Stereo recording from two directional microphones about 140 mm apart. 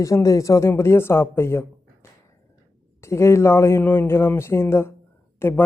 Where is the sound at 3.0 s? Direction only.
20° left (ahead or behind).